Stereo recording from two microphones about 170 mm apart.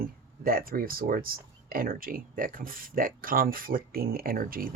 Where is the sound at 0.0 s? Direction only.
60° right (ahead or behind).